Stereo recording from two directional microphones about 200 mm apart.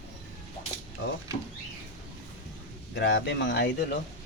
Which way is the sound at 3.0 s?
60° left (ahead or behind).